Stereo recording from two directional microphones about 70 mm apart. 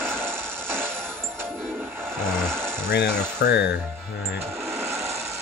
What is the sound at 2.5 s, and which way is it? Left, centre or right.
Sewing machine, right.